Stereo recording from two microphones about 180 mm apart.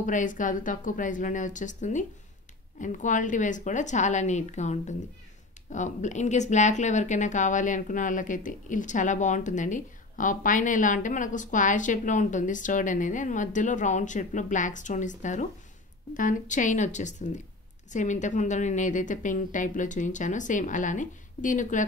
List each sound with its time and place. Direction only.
0.0 s a woman's voice: 45° left (ahead or behind)